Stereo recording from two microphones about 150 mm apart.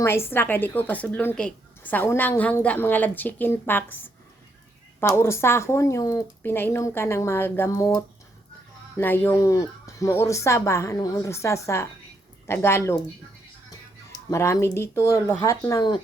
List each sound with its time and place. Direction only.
0.0 s a woman's voice: 15° left (ahead or behind)
14.3 s speech: 20° left (ahead or behind)